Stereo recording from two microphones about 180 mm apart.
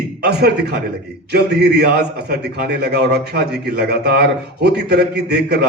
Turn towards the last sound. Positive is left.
turn(degrees=-65)  # may be behind; listen again after turning